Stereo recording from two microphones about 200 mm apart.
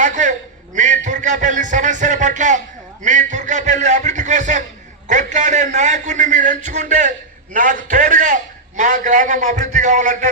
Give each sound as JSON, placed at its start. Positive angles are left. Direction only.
{"t": 0.0, "sound": "a man's voice", "side_deg": -40}